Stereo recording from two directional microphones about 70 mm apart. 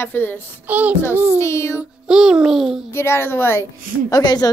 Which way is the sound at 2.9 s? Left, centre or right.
Left.